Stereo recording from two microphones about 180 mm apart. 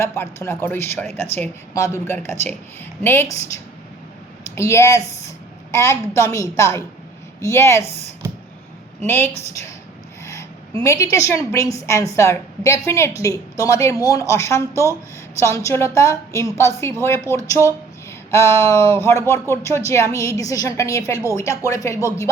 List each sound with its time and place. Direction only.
0.0 s a woman's voice: 15° left (ahead or behind)
4.5 s a woman's voice: 15° left (ahead or behind)
9.0 s a woman's voice: 10° left (ahead or behind)
10.8 s a woman's voice: 15° left (ahead or behind)
18.3 s a woman's voice: 15° left (ahead or behind)